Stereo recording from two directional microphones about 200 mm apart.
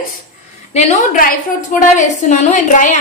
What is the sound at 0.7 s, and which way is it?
A woman's voice, 35° left (ahead or behind).